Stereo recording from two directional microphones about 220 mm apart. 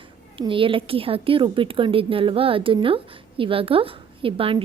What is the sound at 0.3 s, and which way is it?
A woman's voice, 25° right (ahead or behind).